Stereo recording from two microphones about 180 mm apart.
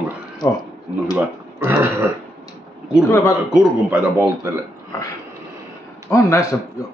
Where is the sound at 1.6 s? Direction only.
10° right (ahead or behind).